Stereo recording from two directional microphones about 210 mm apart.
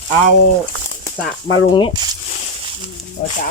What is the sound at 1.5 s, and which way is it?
Speech, 20° left (ahead or behind).